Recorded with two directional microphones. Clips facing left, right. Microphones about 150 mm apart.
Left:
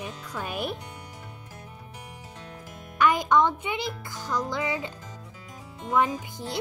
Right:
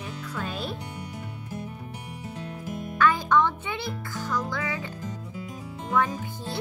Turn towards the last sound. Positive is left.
turn(degrees=15)  # may be behind; listen again after turning